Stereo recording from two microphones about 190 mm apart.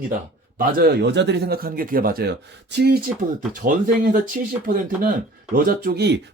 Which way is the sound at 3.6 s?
45° right (ahead or behind).